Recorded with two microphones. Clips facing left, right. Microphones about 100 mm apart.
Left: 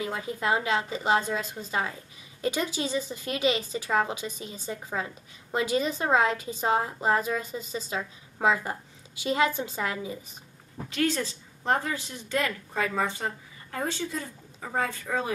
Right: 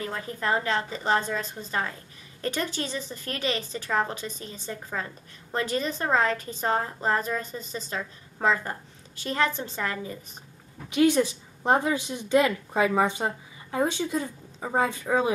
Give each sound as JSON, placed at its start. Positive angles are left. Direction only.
{"t": 0.0, "sound": "a woman's voice", "side_deg": 10}
{"t": 10.9, "sound": "a woman's voice", "side_deg": -15}